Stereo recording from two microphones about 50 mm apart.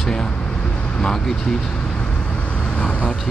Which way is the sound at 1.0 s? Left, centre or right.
Centre.